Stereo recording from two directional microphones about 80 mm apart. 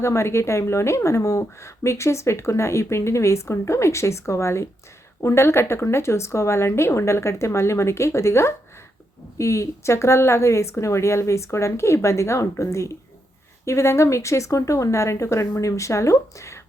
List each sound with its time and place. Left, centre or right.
0.0 s speech: left